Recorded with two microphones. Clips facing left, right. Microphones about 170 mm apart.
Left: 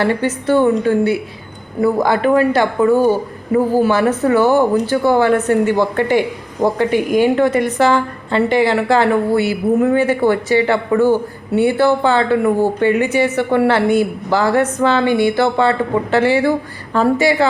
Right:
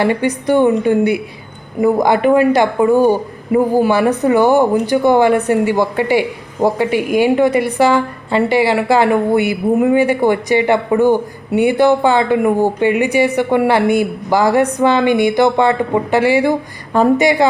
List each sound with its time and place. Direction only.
0.0 s speech: 15° right (ahead or behind)